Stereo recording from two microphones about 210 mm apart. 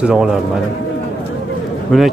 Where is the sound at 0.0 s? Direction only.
5° right (ahead or behind).